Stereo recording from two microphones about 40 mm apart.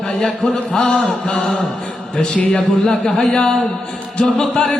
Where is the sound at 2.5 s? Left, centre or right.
Centre.